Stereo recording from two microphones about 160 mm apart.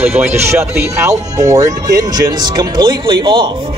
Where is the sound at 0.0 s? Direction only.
15° right (ahead or behind).